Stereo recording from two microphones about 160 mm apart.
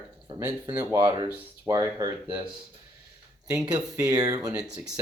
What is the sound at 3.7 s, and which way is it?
Speech, 20° right (ahead or behind).